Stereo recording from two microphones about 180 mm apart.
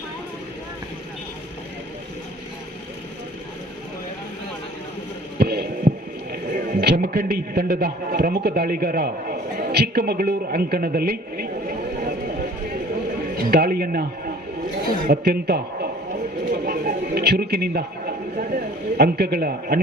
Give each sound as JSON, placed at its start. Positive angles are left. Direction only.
{"t": 5.4, "sound": "heart sounds", "side_deg": -60}
{"t": 6.3, "sound": "a man's voice", "side_deg": -50}
{"t": 13.3, "sound": "a man's voice", "side_deg": -60}
{"t": 15.0, "sound": "a man's voice", "side_deg": -55}
{"t": 16.5, "sound": "a sound", "side_deg": -55}